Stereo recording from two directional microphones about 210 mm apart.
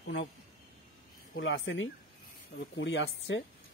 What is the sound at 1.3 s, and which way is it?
Speech, 65° left (ahead or behind).